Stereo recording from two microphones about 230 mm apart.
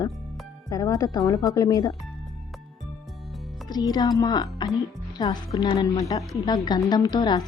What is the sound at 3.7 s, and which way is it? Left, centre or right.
Speech, centre.